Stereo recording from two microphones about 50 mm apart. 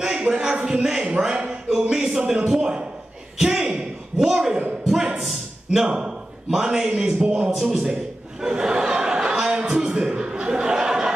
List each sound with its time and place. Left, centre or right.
0.0 s a man's voice: centre
3.3 s a sound: centre
5.9 s a man's voice: centre
8.4 s chuckle: centre